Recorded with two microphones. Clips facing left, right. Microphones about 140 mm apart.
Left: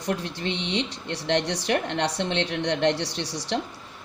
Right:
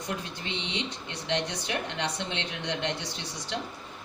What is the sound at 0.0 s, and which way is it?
A woman's voice, 75° left (ahead or behind).